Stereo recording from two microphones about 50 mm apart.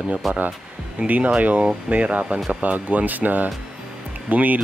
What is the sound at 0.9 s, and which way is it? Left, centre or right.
Speech, right.